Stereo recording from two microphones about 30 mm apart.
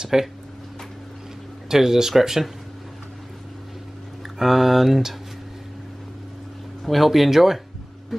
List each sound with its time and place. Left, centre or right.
0.0 s speech: centre
1.7 s speech: centre
4.4 s speech: centre
6.8 s speech: centre